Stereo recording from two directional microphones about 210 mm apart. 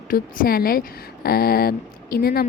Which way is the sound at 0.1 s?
45° left (ahead or behind).